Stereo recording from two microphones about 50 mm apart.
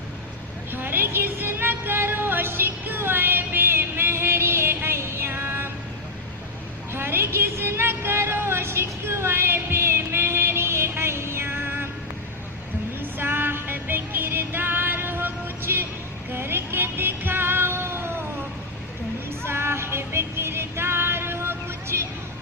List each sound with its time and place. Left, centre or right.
0.7 s music: right
6.9 s a sound: right
13.0 s music: right
16.3 s child singing: right
19.5 s music: right